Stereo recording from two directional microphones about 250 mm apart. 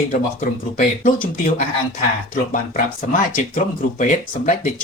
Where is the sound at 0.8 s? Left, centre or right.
Left.